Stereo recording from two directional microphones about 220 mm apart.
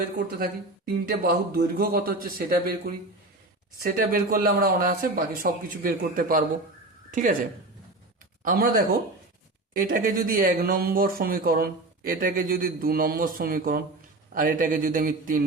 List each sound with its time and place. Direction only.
0.3 s speech: 40° right (ahead or behind)
4.1 s speech: 40° right (ahead or behind)
8.4 s speech: 40° right (ahead or behind)